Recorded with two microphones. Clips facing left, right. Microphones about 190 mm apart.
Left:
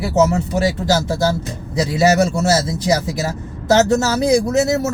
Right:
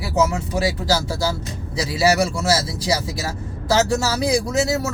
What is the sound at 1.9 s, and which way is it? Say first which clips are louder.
Speech: left 3 dB; 20° left (ahead or behind).